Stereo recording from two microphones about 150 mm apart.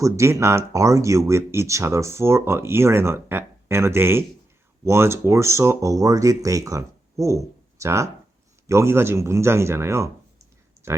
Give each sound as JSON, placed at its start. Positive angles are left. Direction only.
{"t": 0.0, "sound": "speech", "side_deg": -20}